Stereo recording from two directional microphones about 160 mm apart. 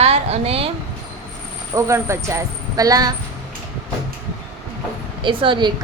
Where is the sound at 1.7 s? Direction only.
15° right (ahead or behind).